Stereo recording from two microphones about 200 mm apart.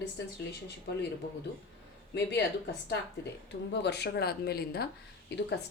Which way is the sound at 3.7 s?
55° left (ahead or behind).